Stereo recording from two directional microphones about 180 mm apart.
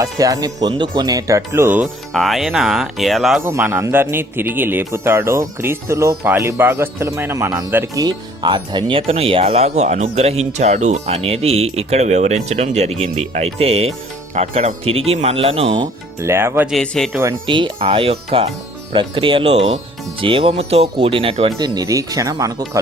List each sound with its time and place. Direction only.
0.0 s a man's voice: 20° right (ahead or behind)
2.1 s speech: centre (ahead or behind)
3.4 s a man's voice: 15° right (ahead or behind)
16.3 s speech: 15° right (ahead or behind)
16.6 s speech: centre (ahead or behind)
17.1 s speech: 15° right (ahead or behind)
17.4 s a man's voice: 30° right (ahead or behind)
21.6 s a man's voice: 20° right (ahead or behind)